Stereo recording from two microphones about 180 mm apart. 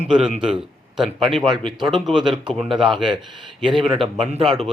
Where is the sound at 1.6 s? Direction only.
25° right (ahead or behind).